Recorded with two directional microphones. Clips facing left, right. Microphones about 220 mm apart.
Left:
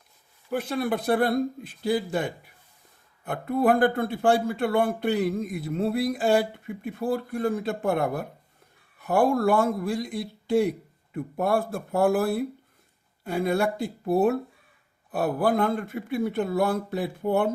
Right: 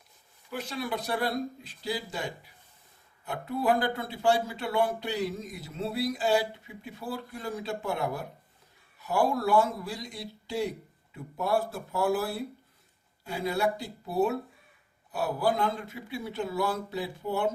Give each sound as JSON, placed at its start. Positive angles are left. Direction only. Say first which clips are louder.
{"t": 0.5, "sound": "a man's voice", "louder": "left 7 dB", "side_deg": 55}